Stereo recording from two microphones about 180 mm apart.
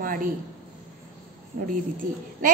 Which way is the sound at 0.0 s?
50° right (ahead or behind).